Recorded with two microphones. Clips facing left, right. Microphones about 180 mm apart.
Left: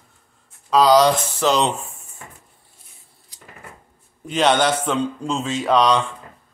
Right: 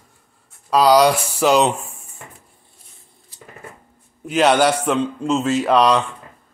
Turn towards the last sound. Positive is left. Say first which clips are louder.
# right 2 dB
turn(degrees=-5)  # may be behind; listen again after turning